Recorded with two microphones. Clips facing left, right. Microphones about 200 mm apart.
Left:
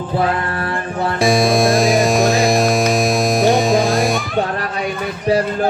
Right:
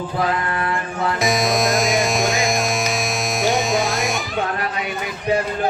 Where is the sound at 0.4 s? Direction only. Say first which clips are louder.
Left 1 dB; 35° left (ahead or behind).